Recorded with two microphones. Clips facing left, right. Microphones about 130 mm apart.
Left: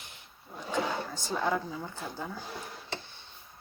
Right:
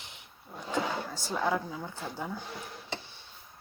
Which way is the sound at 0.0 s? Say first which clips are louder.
Right 1 dB; 20° right (ahead or behind).